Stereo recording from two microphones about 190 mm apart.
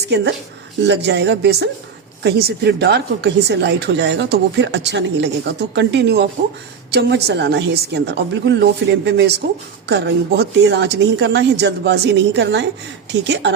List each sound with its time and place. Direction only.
0.9 s speech: 65° right (ahead or behind)